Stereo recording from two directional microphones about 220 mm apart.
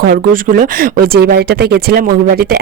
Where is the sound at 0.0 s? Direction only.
40° right (ahead or behind).